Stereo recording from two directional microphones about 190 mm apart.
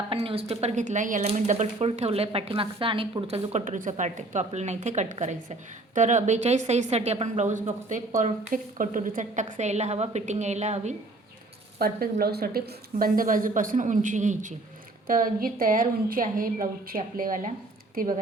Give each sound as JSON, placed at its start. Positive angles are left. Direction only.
{"t": 0.1, "sound": "speech", "side_deg": -30}
{"t": 11.8, "sound": "a woman's voice", "side_deg": -50}